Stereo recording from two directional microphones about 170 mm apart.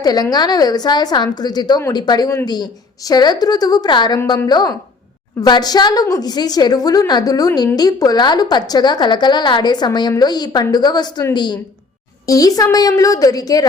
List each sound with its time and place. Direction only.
0.0 s a woman's voice: 25° left (ahead or behind)